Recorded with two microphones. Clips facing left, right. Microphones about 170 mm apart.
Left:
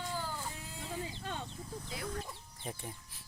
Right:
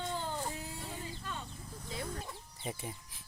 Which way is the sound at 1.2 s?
70° left (ahead or behind).